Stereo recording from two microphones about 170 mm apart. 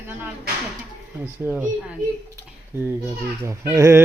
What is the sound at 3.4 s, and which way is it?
Speech, 15° right (ahead or behind).